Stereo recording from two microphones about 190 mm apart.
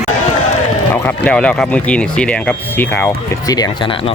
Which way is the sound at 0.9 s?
10° left (ahead or behind).